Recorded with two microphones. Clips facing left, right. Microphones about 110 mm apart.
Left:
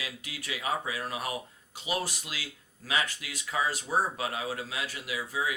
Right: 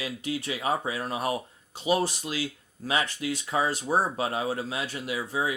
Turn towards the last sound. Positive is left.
turn(degrees=-30)  # may be behind; listen again after turning